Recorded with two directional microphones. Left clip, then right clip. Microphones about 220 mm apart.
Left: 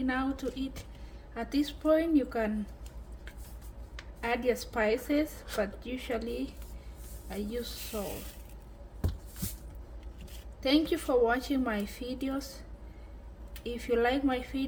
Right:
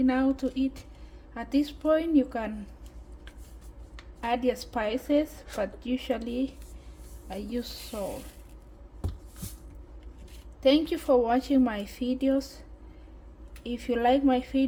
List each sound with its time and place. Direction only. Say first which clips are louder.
0.0 s a woman's voice: right 6 dB; 30° right (ahead or behind)
4.2 s a woman's voice: right 2 dB; 25° right (ahead or behind)
10.6 s a woman's voice: right 5 dB; 25° right (ahead or behind)
13.7 s a woman's voice: right 4 dB; 25° right (ahead or behind)